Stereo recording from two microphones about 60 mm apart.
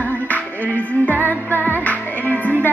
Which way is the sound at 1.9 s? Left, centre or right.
Left.